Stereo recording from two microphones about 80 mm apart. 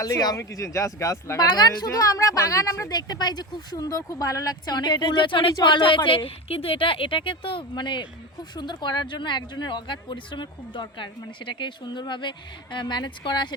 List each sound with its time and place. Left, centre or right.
0.0 s speech: left
0.3 s speech: left
1.4 s speech: left
3.8 s speech: left
8.5 s speech: left